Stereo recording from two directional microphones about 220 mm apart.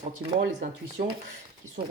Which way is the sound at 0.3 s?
40° right (ahead or behind).